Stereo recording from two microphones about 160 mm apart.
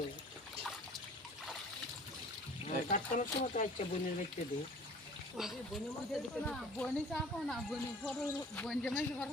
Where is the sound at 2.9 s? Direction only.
50° left (ahead or behind).